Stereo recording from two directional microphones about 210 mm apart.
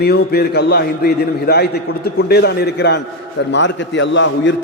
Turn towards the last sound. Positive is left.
turn(degrees=60)  # may be behind; listen again after turning